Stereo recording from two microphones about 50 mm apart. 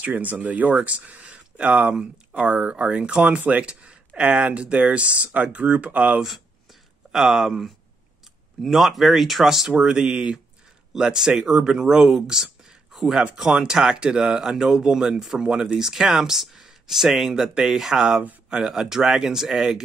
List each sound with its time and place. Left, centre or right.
0.1 s speech: right
7.1 s speech: centre
13.4 s speech: centre